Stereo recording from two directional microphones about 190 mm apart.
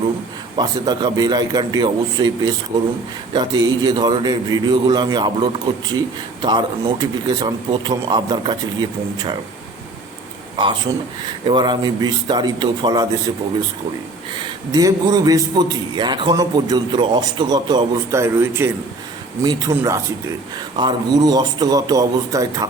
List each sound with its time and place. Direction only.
0.5 s a man's voice: 20° right (ahead or behind)
11.4 s a man's voice: 25° right (ahead or behind)
14.3 s a man's voice: 20° right (ahead or behind)